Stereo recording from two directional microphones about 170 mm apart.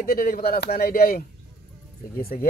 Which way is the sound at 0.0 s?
55° left (ahead or behind).